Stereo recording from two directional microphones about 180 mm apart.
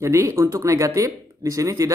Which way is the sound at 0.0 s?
15° right (ahead or behind).